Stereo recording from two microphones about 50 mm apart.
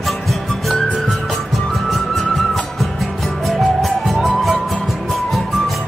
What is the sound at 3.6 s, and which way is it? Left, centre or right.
Music, centre.